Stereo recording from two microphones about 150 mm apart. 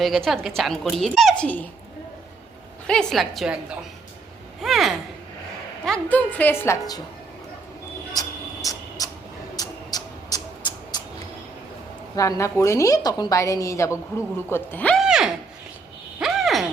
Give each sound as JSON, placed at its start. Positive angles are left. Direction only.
{"t": 0.0, "sound": "speech", "side_deg": 0}
{"t": 2.8, "sound": "speech", "side_deg": 5}
{"t": 4.6, "sound": "a woman's voice", "side_deg": 0}
{"t": 8.1, "sound": "a sound", "side_deg": 25}
{"t": 12.1, "sound": "a woman's voice", "side_deg": 20}
{"t": 14.9, "sound": "a sound", "side_deg": -5}